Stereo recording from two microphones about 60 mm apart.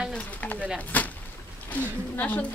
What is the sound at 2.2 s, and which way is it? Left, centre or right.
Speech, left.